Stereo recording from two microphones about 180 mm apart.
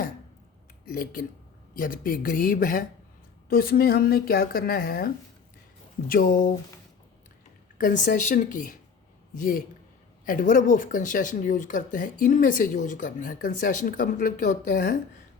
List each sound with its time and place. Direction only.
0.9 s speech: 50° left (ahead or behind)
7.8 s speech: 45° left (ahead or behind)